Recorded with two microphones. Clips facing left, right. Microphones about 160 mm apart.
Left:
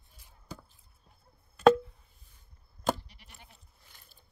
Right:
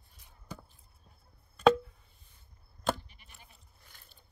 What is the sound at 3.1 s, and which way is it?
Goat, 75° left (ahead or behind).